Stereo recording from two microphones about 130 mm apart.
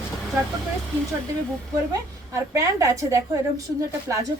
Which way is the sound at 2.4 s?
20° right (ahead or behind).